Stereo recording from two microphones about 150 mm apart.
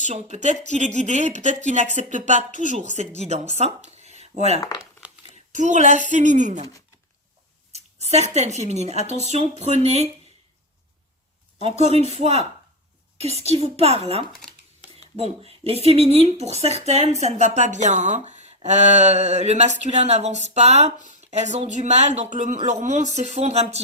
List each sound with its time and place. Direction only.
0.1 s a woman's voice: 50° right (ahead or behind)
3.2 s speech: 45° right (ahead or behind)
4.8 s crumpling: 5° right (ahead or behind)
5.5 s a woman's voice: 55° right (ahead or behind)
7.7 s speech: 45° right (ahead or behind)
11.6 s speech: 45° right (ahead or behind)